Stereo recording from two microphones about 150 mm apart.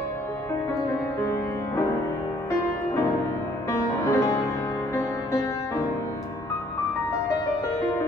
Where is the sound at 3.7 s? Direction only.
20° left (ahead or behind).